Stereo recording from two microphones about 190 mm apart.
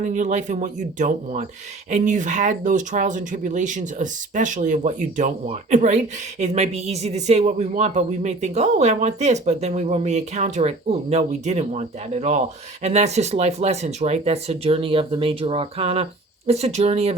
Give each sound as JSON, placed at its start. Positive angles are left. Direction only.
{"t": 0.0, "sound": "speech", "side_deg": -40}